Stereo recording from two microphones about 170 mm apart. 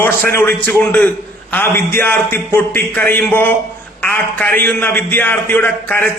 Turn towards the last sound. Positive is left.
turn(degrees=10)  # may be behind; listen again after turning